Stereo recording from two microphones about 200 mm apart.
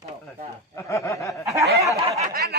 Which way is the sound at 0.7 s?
15° left (ahead or behind).